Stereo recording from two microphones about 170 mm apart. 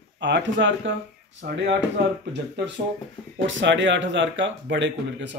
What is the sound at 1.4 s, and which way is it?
Speech, 60° right (ahead or behind).